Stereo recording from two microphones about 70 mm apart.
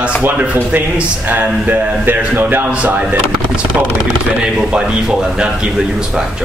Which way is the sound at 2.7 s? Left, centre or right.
Centre.